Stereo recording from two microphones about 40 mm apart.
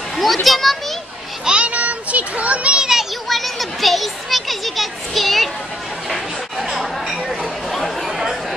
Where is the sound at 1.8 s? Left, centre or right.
Right.